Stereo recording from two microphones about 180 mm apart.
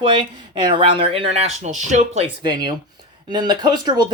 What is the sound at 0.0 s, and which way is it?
Speech, 30° right (ahead or behind).